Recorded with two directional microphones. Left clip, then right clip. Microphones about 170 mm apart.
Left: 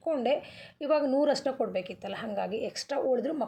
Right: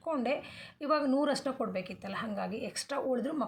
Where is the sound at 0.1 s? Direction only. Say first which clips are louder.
Left 5 dB; 20° left (ahead or behind).